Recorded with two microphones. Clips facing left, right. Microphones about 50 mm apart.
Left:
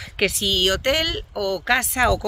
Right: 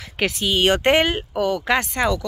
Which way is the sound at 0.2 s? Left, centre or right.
Centre.